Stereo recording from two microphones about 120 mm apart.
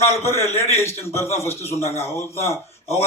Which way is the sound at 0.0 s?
25° left (ahead or behind).